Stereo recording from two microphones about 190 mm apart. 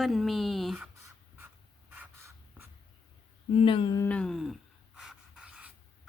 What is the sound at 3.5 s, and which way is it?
Speech, 30° left (ahead or behind).